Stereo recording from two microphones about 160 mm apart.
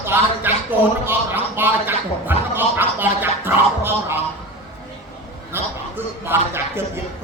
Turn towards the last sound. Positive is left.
turn(degrees=-15)  # may be behind; listen again after turning